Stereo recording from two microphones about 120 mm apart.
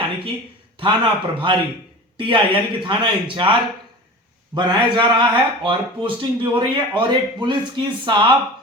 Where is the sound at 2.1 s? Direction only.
45° right (ahead or behind).